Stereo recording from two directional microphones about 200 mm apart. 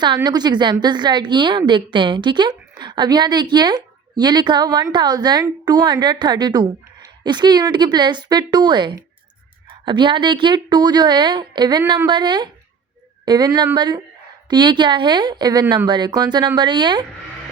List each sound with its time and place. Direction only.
0.0 s a woman's voice: 20° right (ahead or behind)